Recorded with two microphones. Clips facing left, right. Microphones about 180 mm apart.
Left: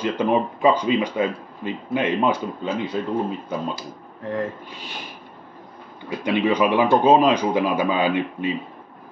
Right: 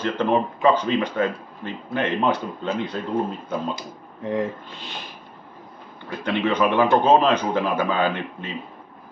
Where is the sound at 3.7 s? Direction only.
20° right (ahead or behind).